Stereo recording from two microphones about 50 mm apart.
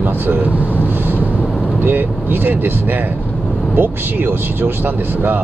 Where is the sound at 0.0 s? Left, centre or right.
Right.